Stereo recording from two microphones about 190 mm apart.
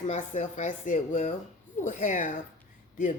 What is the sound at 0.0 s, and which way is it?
Speech, 40° left (ahead or behind).